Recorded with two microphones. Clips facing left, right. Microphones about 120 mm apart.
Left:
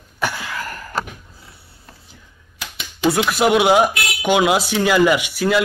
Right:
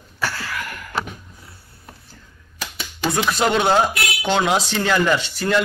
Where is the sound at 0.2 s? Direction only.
20° left (ahead or behind).